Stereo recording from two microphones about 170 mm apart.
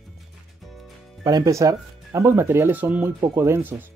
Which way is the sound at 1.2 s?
20° right (ahead or behind).